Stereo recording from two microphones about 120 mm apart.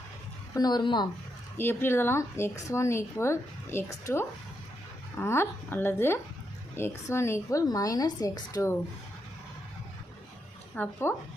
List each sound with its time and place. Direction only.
0.5 s a woman's voice: 35° left (ahead or behind)
1.5 s speech: 20° left (ahead or behind)
10.8 s speech: 15° left (ahead or behind)